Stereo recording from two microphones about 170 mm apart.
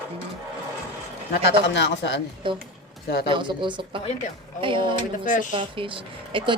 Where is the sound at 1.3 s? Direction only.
85° left.